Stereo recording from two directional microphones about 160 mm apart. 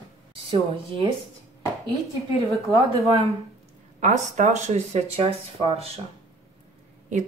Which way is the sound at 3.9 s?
50° right (ahead or behind).